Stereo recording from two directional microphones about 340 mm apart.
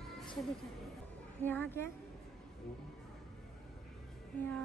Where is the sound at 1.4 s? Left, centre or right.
Centre.